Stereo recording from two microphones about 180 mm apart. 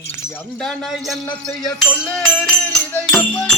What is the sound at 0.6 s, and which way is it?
Music, centre (ahead or behind).